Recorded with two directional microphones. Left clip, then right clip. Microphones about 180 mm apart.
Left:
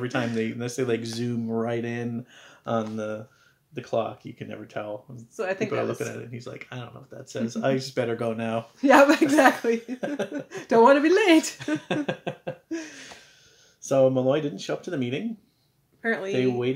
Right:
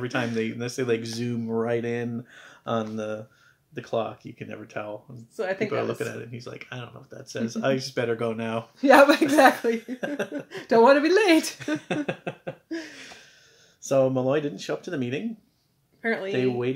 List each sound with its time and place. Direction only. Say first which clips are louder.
0.0 s speech: even; 5° left (ahead or behind)
5.3 s speech: even; 15° right (ahead or behind)
5.7 s speech: even; centre (ahead or behind)
8.8 s speech: right 1 dB; 15° right (ahead or behind)
9.9 s speech: even; 5° left (ahead or behind)
10.3 s speech: even; 15° right (ahead or behind)
12.1 s a sound: left 1 dB; 10° left (ahead or behind)
12.6 s laughter: right 1 dB; 10° right (ahead or behind)
13.7 s speech: left 1 dB; centre (ahead or behind)
16.0 s speech: even; 15° right (ahead or behind)
16.3 s speech: left 2 dB; centre (ahead or behind)